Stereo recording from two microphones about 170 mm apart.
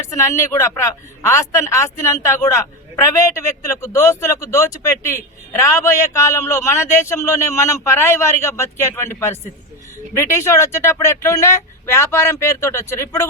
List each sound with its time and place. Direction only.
0.0 s a man's voice: 15° left (ahead or behind)